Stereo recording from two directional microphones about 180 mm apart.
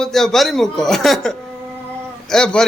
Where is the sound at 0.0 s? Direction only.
5° left (ahead or behind).